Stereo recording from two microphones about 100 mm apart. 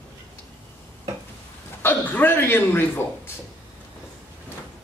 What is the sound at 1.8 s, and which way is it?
Speech, 20° left (ahead or behind).